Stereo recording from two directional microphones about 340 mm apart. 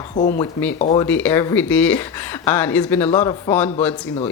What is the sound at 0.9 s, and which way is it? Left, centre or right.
Speech, centre.